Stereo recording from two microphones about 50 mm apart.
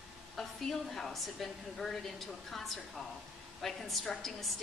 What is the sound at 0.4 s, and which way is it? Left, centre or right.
A woman's voice, centre.